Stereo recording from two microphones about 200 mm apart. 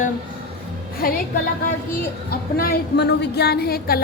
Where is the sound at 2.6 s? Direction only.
50° left (ahead or behind).